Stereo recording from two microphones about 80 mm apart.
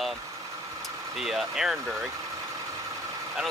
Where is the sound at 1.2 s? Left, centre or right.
Centre.